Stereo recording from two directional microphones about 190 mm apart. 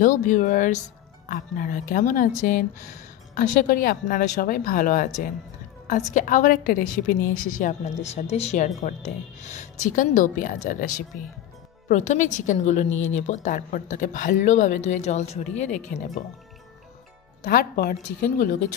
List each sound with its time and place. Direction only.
0.0 s a woman's voice: 45° left (ahead or behind)
17.5 s speech: 55° left (ahead or behind)